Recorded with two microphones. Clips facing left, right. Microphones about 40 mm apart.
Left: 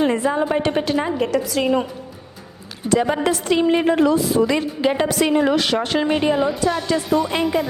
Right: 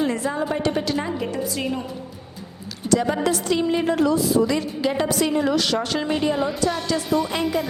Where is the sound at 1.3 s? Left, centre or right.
Left.